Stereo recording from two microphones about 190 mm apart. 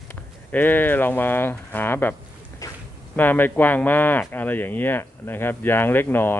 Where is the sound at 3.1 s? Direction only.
10° left (ahead or behind).